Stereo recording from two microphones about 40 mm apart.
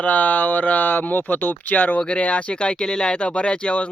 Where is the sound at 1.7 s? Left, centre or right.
Left.